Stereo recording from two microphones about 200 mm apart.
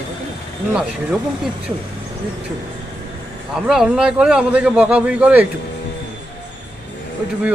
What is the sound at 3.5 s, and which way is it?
A man's voice, centre (ahead or behind).